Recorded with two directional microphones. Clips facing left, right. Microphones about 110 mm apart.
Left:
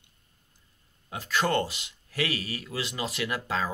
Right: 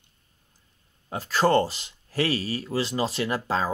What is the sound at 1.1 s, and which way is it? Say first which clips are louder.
Speech: right 5 dB; 35° right (ahead or behind).